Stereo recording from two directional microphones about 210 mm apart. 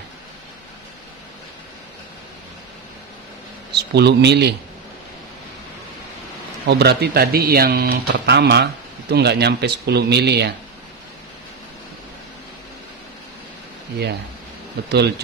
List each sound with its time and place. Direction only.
3.7 s a man's voice: 50° right (ahead or behind)
6.6 s speech: 50° right (ahead or behind)
14.9 s speech: 50° right (ahead or behind)